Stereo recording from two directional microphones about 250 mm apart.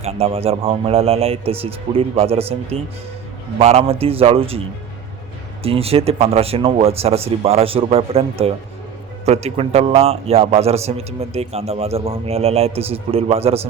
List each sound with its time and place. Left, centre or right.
0.0 s a man's voice: right
5.6 s a man's voice: right